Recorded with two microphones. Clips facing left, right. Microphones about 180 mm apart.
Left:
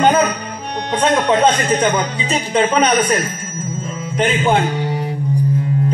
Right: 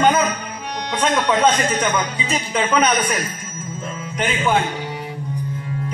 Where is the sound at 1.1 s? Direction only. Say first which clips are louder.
Left 2 dB; 35° left (ahead or behind).